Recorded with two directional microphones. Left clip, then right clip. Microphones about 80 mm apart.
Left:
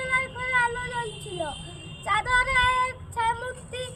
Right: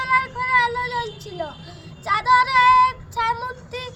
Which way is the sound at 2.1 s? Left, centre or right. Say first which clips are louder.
Right 6 dB; right.